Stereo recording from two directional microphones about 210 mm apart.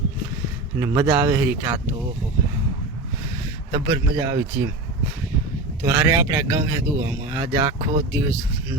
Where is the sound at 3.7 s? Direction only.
15° right (ahead or behind).